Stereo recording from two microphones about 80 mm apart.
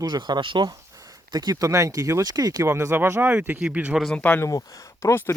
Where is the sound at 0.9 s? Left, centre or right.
Right.